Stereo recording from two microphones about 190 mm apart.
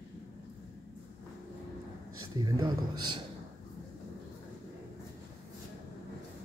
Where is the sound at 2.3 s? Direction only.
25° right (ahead or behind).